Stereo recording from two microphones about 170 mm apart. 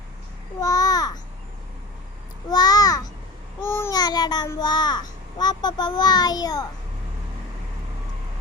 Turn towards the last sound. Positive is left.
turn(degrees=20)  # may be behind; listen again after turning